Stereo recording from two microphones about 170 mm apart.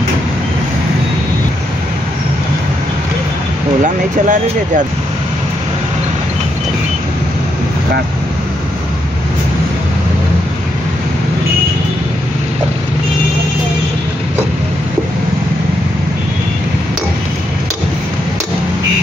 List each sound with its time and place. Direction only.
3.8 s speech: 50° right (ahead or behind)